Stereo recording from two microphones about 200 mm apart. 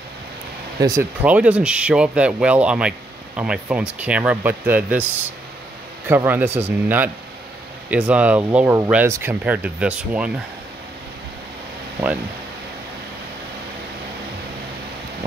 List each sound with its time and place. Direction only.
0.7 s speech: 20° right (ahead or behind)
1.2 s speech: 5° right (ahead or behind)
6.0 s speech: 10° right (ahead or behind)